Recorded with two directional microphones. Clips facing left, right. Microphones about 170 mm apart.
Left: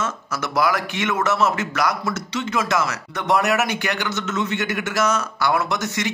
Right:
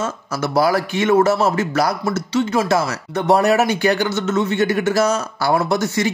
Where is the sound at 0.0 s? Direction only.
30° right (ahead or behind).